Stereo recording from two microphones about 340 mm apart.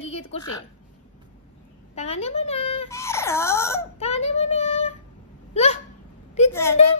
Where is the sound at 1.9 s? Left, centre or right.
Centre.